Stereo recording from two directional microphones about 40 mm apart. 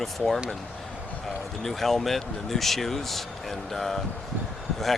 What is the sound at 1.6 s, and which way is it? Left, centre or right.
Speech, centre.